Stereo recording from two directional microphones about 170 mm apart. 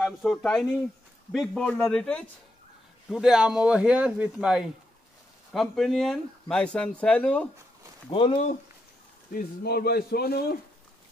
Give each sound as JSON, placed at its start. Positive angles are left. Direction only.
{"t": 0.0, "sound": "speech", "side_deg": 0}
{"t": 8.1, "sound": "speech", "side_deg": 30}
{"t": 9.3, "sound": "a man's voice", "side_deg": 65}